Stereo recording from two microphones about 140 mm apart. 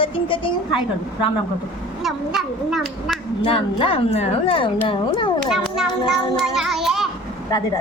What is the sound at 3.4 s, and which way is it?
Speech, 40° left (ahead or behind).